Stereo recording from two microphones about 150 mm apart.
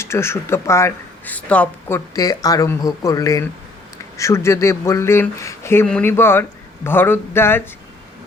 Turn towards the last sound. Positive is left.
turn(degrees=15)  # may be behind; listen again after turning